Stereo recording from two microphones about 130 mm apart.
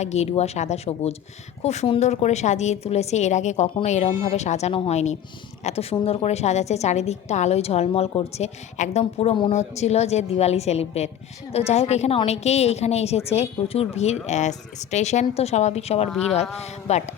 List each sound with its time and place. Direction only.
0.0 s a woman's voice: 60° left (ahead or behind)